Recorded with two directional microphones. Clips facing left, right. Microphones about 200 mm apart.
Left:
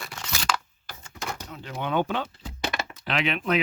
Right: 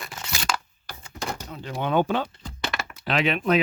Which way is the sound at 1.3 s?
35° right (ahead or behind).